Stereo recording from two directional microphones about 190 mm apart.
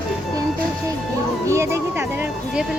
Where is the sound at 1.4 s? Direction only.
15° right (ahead or behind).